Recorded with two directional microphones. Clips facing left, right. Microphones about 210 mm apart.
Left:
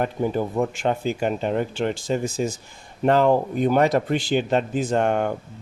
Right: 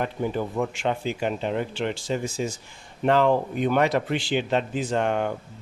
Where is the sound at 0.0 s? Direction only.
45° left (ahead or behind).